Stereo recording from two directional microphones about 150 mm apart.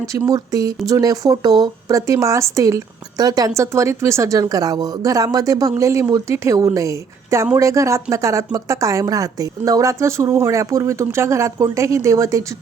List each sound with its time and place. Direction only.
0.1 s speech: 20° right (ahead or behind)